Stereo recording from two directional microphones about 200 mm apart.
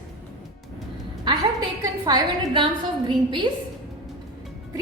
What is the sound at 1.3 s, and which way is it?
A woman's voice, 20° right (ahead or behind).